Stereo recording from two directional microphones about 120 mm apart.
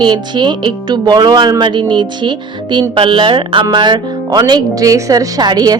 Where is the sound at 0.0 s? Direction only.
40° right (ahead or behind).